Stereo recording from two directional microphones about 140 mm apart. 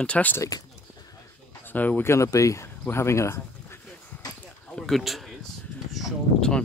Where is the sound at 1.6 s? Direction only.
15° left (ahead or behind).